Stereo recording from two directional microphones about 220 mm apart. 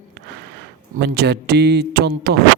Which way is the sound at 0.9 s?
50° right (ahead or behind).